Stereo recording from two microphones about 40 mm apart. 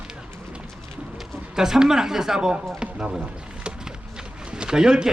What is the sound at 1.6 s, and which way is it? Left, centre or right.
Speech, centre.